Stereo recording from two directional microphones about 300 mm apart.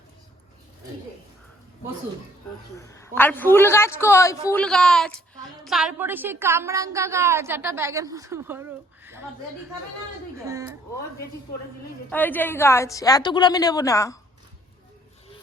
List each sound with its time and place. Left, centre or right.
2.7 s a woman's voice: centre
10.3 s speech: centre
12.1 s a woman's voice: centre